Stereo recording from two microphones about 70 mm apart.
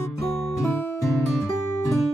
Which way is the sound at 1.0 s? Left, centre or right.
Centre.